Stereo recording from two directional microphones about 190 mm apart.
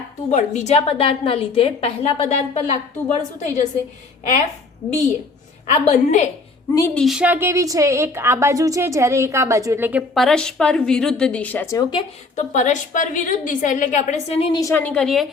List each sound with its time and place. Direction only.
0.3 s a woman's voice: 40° left (ahead or behind)
5.6 s a woman's voice: 40° left (ahead or behind)
6.7 s a woman's voice: 15° left (ahead or behind)
7.0 s a woman's voice: 5° right (ahead or behind)
10.2 s a woman's voice: 5° left (ahead or behind); by 12.0 s 20° left (ahead or behind)
12.4 s a woman's voice: 40° left (ahead or behind)
14.5 s a woman's voice: 15° left (ahead or behind)